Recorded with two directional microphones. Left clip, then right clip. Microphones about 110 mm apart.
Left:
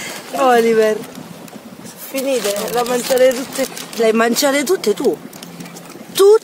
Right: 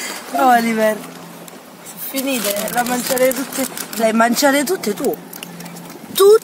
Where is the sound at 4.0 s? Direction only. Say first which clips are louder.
Left 1 dB; 25° left (ahead or behind).